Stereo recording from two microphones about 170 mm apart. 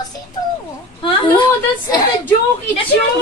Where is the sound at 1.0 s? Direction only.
30° left (ahead or behind).